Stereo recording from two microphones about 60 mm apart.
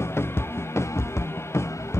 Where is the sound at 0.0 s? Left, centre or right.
Left.